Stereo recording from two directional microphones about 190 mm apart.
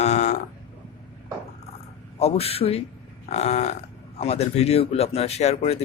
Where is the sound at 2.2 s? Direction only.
30° left (ahead or behind).